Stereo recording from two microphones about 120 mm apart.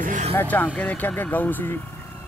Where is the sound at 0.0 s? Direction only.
90° right.